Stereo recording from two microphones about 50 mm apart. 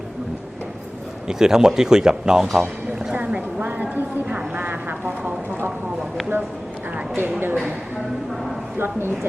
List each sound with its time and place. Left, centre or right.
1.3 s speech: centre
3.6 s a sound: right
4.5 s vehicle: right
7.2 s speech: right
8.8 s speech: right